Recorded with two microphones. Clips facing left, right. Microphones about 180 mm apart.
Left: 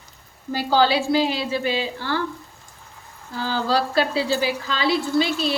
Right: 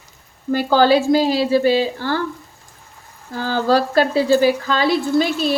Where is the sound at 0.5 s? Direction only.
50° right (ahead or behind).